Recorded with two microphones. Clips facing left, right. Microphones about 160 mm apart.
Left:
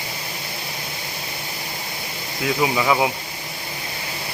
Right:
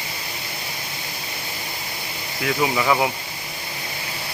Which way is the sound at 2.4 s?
15° left (ahead or behind).